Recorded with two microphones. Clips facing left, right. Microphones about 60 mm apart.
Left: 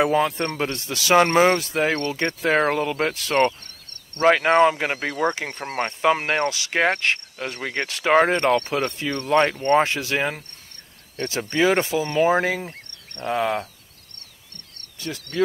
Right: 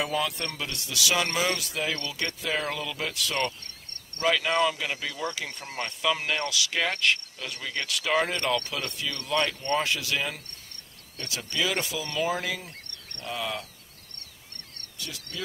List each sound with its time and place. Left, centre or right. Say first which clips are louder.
0.0 s speech: left 9 dB; left
15.0 s speech: left 13 dB; left